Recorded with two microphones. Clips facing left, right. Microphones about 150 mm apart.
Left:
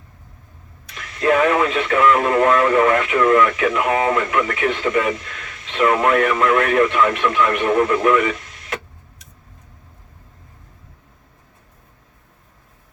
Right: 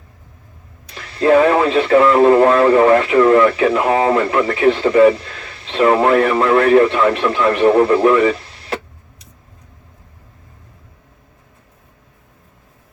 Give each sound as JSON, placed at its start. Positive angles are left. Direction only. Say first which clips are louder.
{"t": 0.9, "sound": "speech", "louder": "right 5 dB", "side_deg": -30}